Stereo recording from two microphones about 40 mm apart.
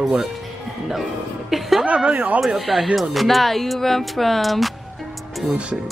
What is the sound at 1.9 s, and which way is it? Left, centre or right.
Speech, right.